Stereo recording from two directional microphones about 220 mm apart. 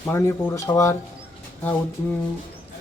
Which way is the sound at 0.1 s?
10° left (ahead or behind).